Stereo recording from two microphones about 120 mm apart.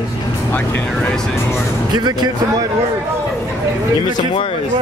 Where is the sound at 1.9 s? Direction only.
35° right (ahead or behind).